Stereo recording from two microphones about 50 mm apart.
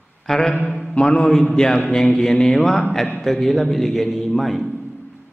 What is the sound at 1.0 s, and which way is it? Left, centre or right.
Speech, left.